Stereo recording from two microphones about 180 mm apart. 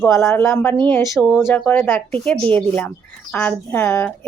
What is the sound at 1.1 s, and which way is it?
Speech, centre (ahead or behind).